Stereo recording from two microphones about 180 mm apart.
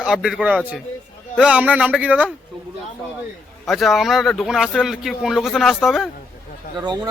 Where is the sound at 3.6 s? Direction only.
Centre (ahead or behind).